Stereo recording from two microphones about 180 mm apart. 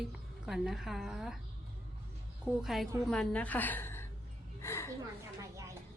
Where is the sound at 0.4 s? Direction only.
Centre (ahead or behind).